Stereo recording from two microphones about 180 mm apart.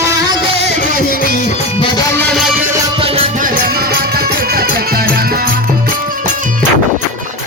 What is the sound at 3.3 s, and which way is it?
Music, 50° right (ahead or behind).